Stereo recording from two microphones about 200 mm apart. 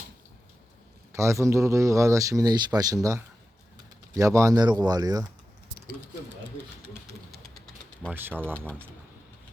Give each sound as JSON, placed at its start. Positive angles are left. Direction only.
{"t": 1.1, "sound": "speech", "side_deg": -15}
{"t": 8.1, "sound": "speech", "side_deg": -10}